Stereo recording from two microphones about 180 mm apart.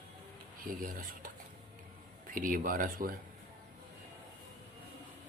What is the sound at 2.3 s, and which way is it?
Speech, 50° right (ahead or behind).